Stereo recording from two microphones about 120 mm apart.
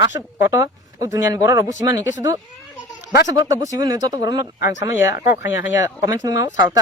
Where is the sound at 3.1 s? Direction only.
30° right (ahead or behind).